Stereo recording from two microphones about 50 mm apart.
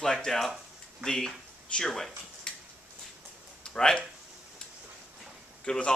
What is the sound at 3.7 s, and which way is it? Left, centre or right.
Speech, centre.